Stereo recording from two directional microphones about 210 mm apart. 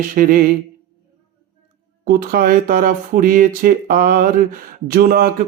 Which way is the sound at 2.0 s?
45° right (ahead or behind).